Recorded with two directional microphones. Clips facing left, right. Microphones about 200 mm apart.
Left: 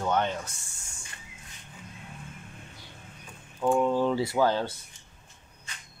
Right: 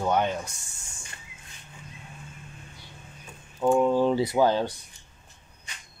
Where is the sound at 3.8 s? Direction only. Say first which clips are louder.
Right 3 dB; 20° right (ahead or behind).